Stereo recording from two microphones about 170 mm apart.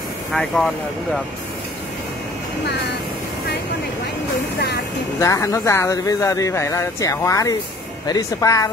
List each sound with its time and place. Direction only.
0.3 s speech: centre (ahead or behind)
5.2 s speech: 20° left (ahead or behind)